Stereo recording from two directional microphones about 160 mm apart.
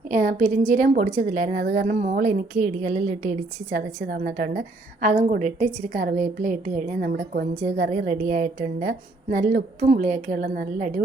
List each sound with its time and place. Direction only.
0.1 s a woman's voice: 55° right (ahead or behind)
3.7 s a woman's voice: 65° right (ahead or behind)